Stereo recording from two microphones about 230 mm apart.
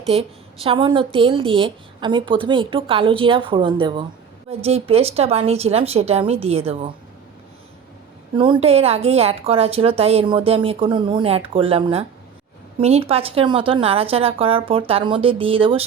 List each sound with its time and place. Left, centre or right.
0.1 s a woman's voice: right
8.4 s a woman's voice: right